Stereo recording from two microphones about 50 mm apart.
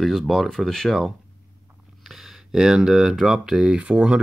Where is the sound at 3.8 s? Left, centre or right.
Right.